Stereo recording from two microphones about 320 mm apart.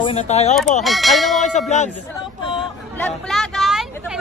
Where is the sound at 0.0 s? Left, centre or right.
Centre.